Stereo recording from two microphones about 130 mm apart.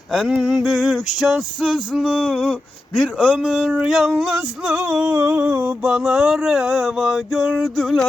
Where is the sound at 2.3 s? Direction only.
5° right (ahead or behind).